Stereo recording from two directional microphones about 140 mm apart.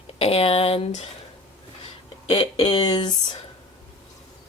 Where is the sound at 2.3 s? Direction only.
35° left (ahead or behind).